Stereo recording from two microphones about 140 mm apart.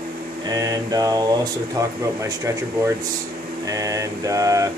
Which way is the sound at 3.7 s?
25° right (ahead or behind).